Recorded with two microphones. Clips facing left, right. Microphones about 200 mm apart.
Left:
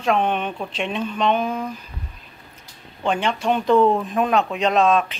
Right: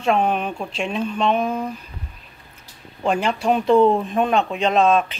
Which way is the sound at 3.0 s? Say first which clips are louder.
Right 2 dB; 5° right (ahead or behind).